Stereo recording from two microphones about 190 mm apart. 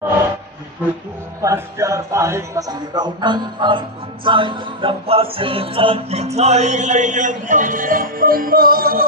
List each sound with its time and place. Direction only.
1.4 s music: 15° right (ahead or behind); by 9.0 s 50° right (ahead or behind)